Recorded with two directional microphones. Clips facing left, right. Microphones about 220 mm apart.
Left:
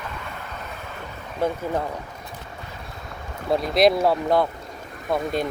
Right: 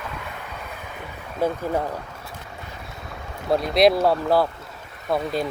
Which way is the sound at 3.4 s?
Centre (ahead or behind).